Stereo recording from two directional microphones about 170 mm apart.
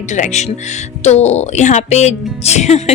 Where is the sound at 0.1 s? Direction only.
45° left (ahead or behind).